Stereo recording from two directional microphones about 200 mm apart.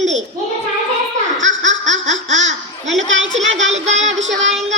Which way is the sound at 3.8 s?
35° right (ahead or behind).